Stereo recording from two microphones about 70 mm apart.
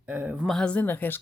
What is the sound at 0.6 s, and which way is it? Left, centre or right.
Speech, left.